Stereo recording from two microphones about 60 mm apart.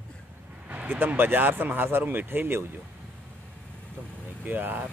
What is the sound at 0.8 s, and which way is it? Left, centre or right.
Speech, right.